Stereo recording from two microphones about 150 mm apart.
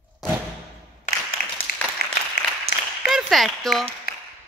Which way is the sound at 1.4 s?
80° left.